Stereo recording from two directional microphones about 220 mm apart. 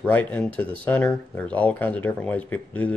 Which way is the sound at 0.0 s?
5° left (ahead or behind).